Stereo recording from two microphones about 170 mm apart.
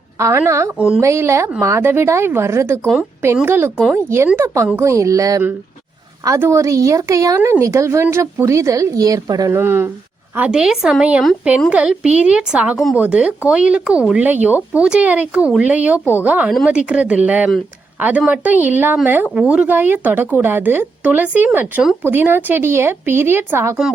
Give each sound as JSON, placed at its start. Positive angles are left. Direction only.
{"t": 0.2, "sound": "speech", "side_deg": -15}
{"t": 2.8, "sound": "a woman's voice", "side_deg": 0}
{"t": 3.4, "sound": "a woman's voice", "side_deg": -15}